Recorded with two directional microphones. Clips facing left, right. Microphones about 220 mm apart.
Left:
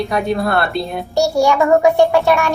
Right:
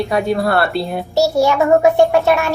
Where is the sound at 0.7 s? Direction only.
5° right (ahead or behind).